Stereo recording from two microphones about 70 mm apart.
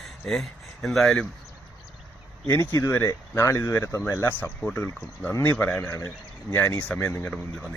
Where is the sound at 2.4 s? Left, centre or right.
Left.